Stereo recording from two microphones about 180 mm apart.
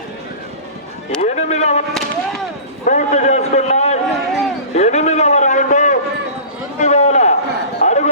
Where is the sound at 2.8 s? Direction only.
40° left (ahead or behind).